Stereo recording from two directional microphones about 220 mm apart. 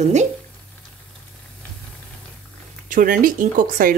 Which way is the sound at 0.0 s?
30° right (ahead or behind).